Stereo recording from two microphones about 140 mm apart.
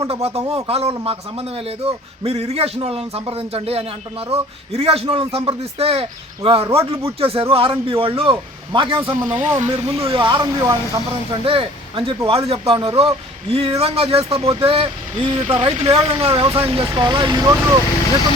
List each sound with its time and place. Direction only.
0.1 s a man's voice: 45° right (ahead or behind)
9.3 s a man's voice: 60° right (ahead or behind); by 11.0 s 25° right (ahead or behind)
11.4 s a man's voice: 40° right (ahead or behind)